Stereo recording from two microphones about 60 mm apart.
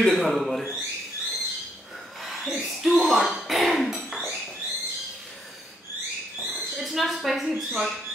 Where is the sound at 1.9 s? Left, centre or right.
Centre.